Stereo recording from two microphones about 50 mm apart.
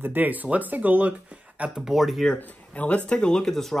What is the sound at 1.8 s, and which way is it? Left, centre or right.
Speech, centre.